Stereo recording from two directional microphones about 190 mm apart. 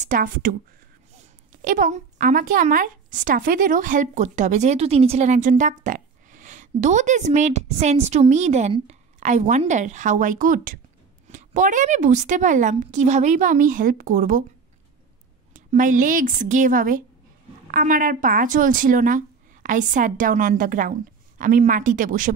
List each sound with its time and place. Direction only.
0.0 s a woman's voice: 45° right (ahead or behind)
15.5 s a woman's voice: 45° right (ahead or behind)